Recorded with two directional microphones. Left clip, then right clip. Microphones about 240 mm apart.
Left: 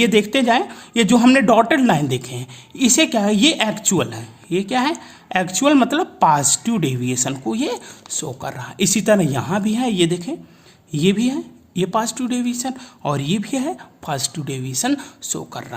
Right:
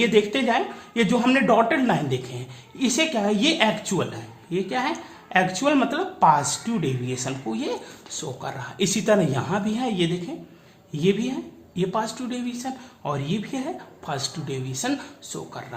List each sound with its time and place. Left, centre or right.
0.0 s a woman's voice: left